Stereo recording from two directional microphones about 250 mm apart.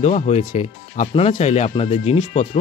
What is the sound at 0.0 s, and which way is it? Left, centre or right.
Speech, left.